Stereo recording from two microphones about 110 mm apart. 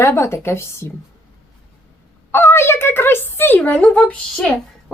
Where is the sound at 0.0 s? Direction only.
25° left (ahead or behind).